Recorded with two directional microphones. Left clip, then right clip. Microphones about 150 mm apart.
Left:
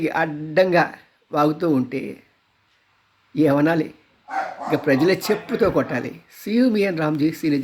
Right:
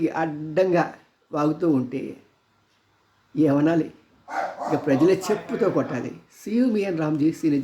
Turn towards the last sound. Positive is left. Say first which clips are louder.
# left 1 dB
turn(degrees=20)  # may be behind; listen again after turning